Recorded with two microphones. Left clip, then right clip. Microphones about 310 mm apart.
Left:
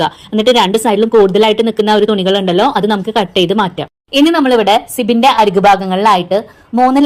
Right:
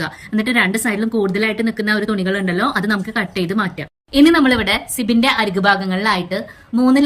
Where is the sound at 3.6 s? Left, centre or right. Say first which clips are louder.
Left 7 dB; left.